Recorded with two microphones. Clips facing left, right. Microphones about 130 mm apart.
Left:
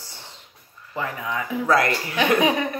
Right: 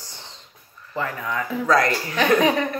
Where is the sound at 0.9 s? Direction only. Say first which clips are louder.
Right 1 dB; 15° left (ahead or behind).